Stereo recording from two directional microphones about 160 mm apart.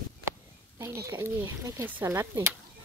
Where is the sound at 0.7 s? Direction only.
15° right (ahead or behind).